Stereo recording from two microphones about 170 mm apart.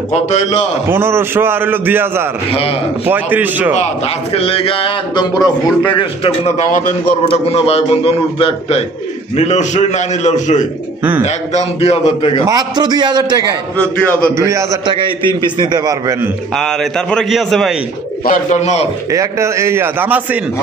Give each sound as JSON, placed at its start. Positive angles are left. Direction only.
{"t": 0.1, "sound": "a man's voice", "side_deg": 40}
{"t": 0.8, "sound": "a man's voice", "side_deg": -15}
{"t": 3.7, "sound": "a man's voice", "side_deg": 35}
{"t": 6.5, "sound": "a man's voice", "side_deg": 45}
{"t": 7.2, "sound": "a man's voice", "side_deg": 35}
{"t": 12.4, "sound": "a man's voice", "side_deg": -25}
{"t": 15.0, "sound": "a man's voice", "side_deg": -30}
{"t": 16.5, "sound": "a man's voice", "side_deg": 5}
{"t": 18.2, "sound": "a man's voice", "side_deg": 45}
{"t": 19.1, "sound": "a man's voice", "side_deg": -15}